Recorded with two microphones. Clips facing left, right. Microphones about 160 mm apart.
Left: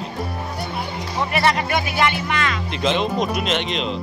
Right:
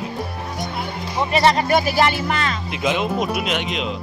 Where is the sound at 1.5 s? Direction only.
35° right (ahead or behind).